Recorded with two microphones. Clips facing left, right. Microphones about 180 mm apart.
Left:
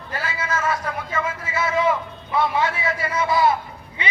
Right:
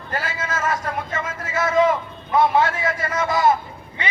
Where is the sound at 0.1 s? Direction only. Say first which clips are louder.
Even; 50° right (ahead or behind).